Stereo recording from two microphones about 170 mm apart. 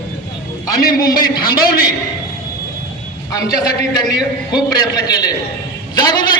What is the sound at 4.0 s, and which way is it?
A man's voice, 25° left (ahead or behind).